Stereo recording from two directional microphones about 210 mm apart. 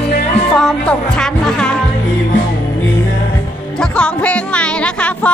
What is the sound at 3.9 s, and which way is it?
Music, 5° left (ahead or behind).